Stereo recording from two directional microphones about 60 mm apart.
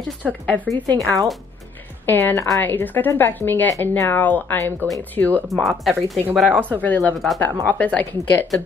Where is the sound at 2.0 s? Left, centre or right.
Left.